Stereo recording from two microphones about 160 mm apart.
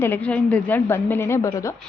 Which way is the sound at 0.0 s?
10° left (ahead or behind).